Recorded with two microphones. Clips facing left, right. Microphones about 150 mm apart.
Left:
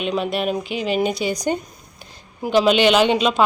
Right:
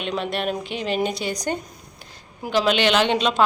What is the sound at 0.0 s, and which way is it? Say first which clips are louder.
A woman's voice: left 3 dB; 10° left (ahead or behind).